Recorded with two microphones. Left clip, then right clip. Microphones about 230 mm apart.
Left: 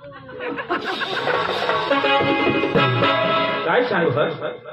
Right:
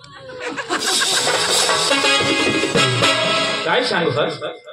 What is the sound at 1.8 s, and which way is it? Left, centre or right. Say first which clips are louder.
Music: right 2 dB; right.